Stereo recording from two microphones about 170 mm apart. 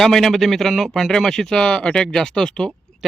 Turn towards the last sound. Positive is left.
turn(degrees=0)  # may be behind; listen again after turning